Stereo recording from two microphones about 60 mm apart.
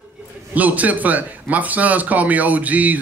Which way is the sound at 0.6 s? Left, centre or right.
Right.